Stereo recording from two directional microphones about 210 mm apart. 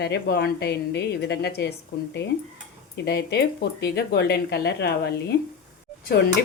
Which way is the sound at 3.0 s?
50° left (ahead or behind).